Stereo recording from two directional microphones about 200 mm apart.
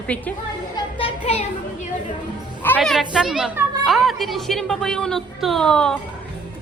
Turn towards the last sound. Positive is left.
turn(degrees=5)  # may be behind; listen again after turning